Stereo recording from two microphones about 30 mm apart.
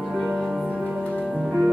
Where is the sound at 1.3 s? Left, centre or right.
Centre.